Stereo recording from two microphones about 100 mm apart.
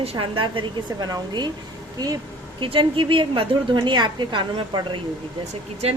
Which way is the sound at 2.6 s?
60° right (ahead or behind).